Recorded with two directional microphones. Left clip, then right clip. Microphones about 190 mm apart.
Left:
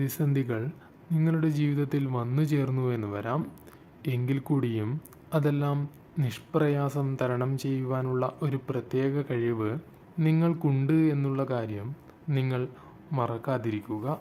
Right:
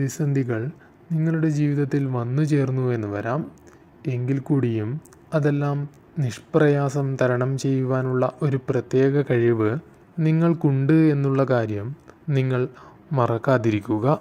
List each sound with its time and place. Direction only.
0.0 s speech: 10° right (ahead or behind); by 14.2 s 35° right (ahead or behind)